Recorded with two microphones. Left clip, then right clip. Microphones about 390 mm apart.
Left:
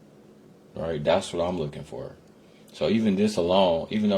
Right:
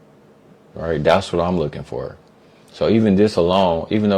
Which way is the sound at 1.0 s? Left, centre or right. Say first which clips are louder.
Right 8 dB; right.